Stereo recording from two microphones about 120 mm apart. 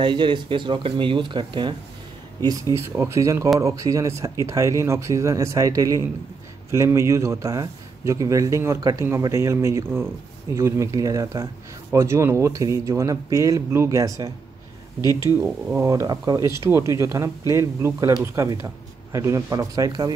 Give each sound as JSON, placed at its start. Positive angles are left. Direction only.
{"t": 0.0, "sound": "speech", "side_deg": -40}
{"t": 2.4, "sound": "a man's voice", "side_deg": -30}
{"t": 15.0, "sound": "speech", "side_deg": 30}
{"t": 15.4, "sound": "a man's voice", "side_deg": -20}